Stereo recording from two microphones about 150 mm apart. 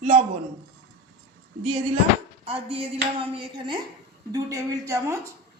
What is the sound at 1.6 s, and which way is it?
Speech, 40° right (ahead or behind).